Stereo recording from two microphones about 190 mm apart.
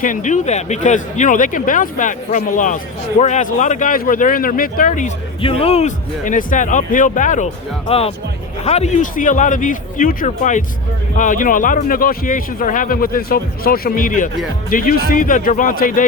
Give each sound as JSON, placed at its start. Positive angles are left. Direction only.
{"t": 0.0, "sound": "speech", "side_deg": 40}
{"t": 5.4, "sound": "speech", "side_deg": 30}
{"t": 7.9, "sound": "speech", "side_deg": 30}